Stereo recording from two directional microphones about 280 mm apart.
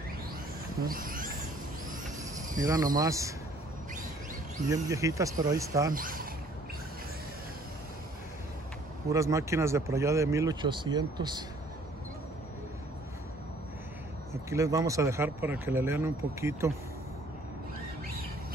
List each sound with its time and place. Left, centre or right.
0.7 s insect: right
2.5 s speech: centre
4.6 s speech: centre
5.9 s speech: right
9.1 s speech: centre
14.3 s speech: centre